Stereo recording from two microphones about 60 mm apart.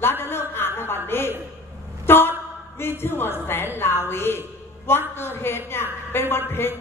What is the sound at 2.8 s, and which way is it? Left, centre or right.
A woman's voice, left.